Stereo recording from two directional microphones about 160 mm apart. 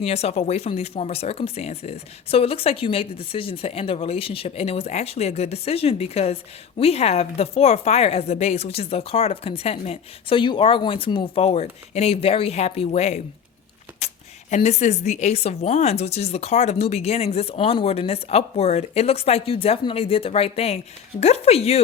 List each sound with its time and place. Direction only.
0.0 s speech: 40° left (ahead or behind)
14.0 s a sound: 40° left (ahead or behind)
14.5 s speech: 45° left (ahead or behind)